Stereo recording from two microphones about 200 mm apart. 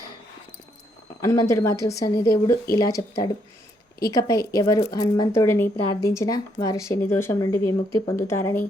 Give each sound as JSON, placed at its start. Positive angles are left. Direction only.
{"t": 1.2, "sound": "speech", "side_deg": 15}